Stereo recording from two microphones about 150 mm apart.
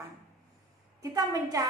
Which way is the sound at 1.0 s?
25° right (ahead or behind).